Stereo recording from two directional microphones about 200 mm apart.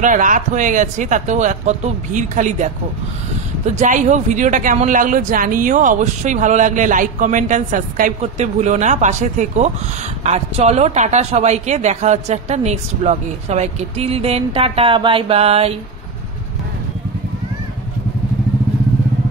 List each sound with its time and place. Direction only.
0.0 s speech: 40° right (ahead or behind)